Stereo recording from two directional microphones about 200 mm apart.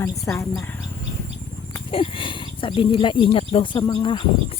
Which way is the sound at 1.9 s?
25° left (ahead or behind).